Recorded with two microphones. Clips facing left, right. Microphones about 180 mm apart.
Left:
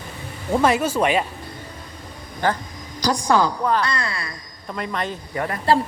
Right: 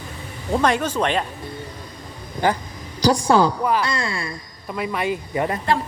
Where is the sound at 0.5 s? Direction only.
5° left (ahead or behind).